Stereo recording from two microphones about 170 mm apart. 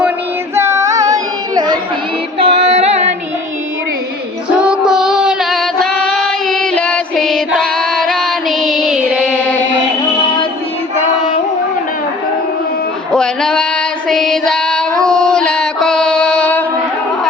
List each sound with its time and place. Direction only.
0.5 s child singing: 15° right (ahead or behind)
2.4 s female singing: 35° right (ahead or behind)
4.5 s female singing: 5° right (ahead or behind)
13.1 s singing: 5° left (ahead or behind)
14.1 s female singing: centre (ahead or behind)